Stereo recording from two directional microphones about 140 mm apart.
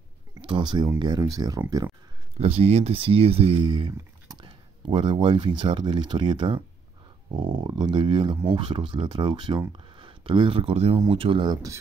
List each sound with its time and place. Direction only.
0.4 s speech: 35° right (ahead or behind)
2.3 s speech: 45° right (ahead or behind); by 11.8 s 25° right (ahead or behind)